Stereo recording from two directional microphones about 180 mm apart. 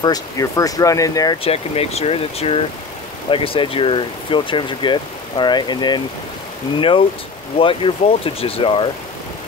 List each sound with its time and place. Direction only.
0.0 s speech: 20° left (ahead or behind)
1.4 s speech: 35° left (ahead or behind)